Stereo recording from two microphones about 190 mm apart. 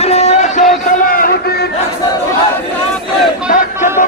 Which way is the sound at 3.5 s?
40° left (ahead or behind).